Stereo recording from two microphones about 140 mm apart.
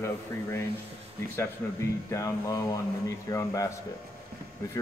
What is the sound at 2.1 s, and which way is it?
A man's voice, 25° left (ahead or behind).